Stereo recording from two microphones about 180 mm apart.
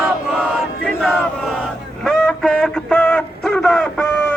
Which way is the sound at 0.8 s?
Centre (ahead or behind).